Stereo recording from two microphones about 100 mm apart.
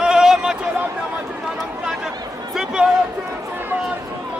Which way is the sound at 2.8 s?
10° right (ahead or behind).